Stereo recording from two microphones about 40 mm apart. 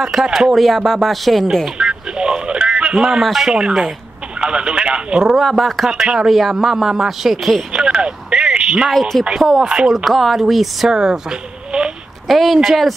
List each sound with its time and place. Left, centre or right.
0.0 s a man's voice: centre
0.6 s speech: centre
1.8 s a sound: right
3.3 s speech: centre
4.4 s speech: right
5.3 s speech: centre
5.9 s a man's voice: centre
7.7 s telephone: right
9.1 s speech: centre
9.6 s speech: centre
9.9 s speech: centre
10.9 s speech: centre
12.3 s speech: centre